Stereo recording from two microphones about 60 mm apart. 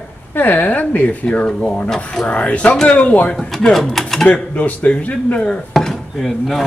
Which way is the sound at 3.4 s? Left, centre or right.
Centre.